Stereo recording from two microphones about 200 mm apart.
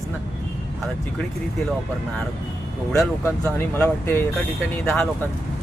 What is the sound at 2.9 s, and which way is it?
Speech, 15° left (ahead or behind).